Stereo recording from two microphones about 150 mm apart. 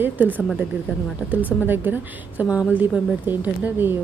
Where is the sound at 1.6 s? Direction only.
15° right (ahead or behind).